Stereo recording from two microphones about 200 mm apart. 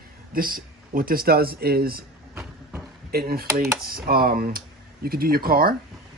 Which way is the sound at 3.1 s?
50° right (ahead or behind).